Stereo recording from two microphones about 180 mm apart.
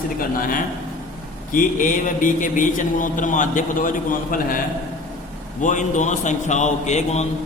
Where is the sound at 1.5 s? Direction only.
50° left (ahead or behind).